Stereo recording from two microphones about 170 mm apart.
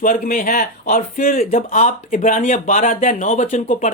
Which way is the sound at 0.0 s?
55° left (ahead or behind).